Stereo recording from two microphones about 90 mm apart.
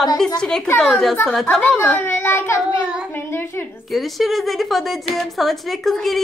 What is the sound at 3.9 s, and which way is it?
A woman's voice, centre (ahead or behind).